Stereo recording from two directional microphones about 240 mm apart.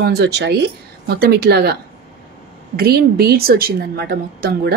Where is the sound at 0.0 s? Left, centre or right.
Right.